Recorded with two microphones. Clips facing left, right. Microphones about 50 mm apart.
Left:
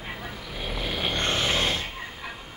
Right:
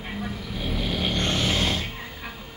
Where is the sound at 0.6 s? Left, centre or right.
Centre.